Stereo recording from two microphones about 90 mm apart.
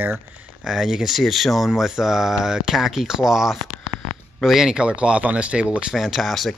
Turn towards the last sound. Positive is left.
turn(degrees=0)  # may be behind; listen again after turning